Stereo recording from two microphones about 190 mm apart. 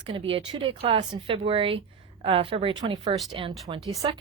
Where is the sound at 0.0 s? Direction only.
30° right (ahead or behind).